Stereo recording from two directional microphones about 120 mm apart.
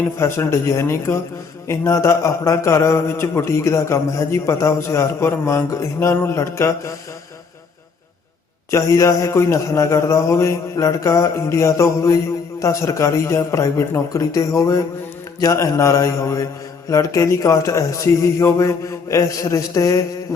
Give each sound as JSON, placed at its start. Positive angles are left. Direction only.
{"t": 0.2, "sound": "a man's voice", "side_deg": 20}
{"t": 8.7, "sound": "a man's voice", "side_deg": 25}